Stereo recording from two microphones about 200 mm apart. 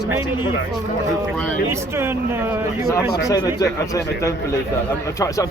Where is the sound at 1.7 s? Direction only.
10° right (ahead or behind).